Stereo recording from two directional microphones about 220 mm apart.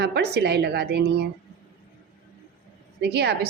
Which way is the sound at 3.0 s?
50° right (ahead or behind).